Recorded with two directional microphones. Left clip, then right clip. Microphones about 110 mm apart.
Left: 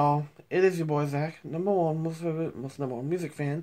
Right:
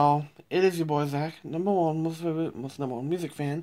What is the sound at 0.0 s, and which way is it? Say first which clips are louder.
Speech: right 3 dB; 5° left (ahead or behind).